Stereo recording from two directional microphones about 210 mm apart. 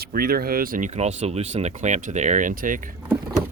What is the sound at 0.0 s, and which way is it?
Speech, 45° right (ahead or behind).